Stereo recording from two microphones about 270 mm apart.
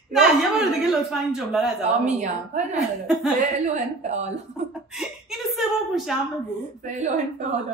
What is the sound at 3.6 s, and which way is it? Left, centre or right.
Speech, right.